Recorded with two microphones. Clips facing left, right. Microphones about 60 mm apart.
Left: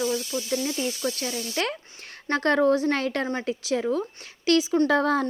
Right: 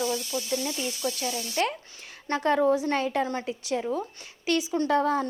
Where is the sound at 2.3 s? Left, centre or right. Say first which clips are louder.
Left 2 dB; left.